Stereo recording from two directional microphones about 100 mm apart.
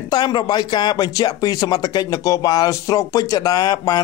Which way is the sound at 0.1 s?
45° left (ahead or behind).